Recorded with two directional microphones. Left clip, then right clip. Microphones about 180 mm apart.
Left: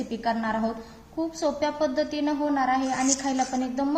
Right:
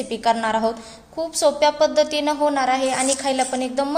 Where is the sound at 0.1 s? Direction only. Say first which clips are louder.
Right 8 dB; 50° right (ahead or behind).